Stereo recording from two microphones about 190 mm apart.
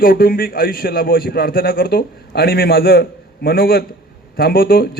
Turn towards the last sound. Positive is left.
turn(degrees=50)  # may be behind; listen again after turning